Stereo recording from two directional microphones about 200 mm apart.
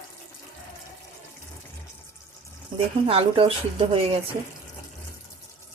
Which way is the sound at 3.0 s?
25° right (ahead or behind).